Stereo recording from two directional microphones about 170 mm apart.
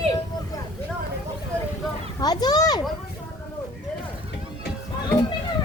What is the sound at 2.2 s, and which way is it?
Children playing, 25° left (ahead or behind).